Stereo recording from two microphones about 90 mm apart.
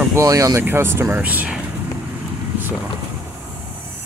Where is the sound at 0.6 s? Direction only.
25° right (ahead or behind).